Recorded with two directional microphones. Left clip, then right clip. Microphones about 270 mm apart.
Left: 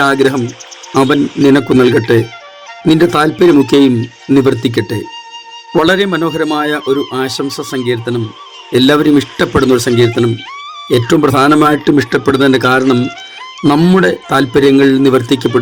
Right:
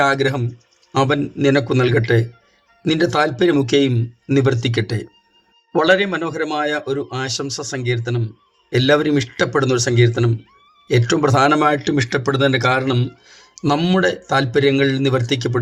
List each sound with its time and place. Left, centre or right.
0.0 s a man's voice: left